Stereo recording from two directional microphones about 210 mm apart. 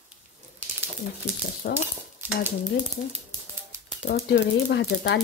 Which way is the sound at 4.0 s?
55° left (ahead or behind).